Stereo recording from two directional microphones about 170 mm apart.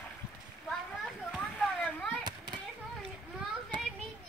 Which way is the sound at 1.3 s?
Centre (ahead or behind).